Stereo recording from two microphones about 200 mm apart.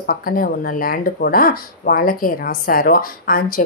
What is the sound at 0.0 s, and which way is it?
Speech, 45° left (ahead or behind).